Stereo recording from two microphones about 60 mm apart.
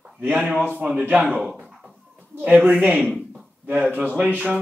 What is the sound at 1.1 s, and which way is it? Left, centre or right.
Speech, centre.